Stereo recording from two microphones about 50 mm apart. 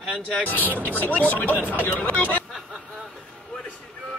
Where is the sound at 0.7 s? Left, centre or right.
Right.